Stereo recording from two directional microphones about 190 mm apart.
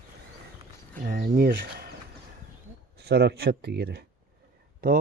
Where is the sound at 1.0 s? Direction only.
50° right (ahead or behind).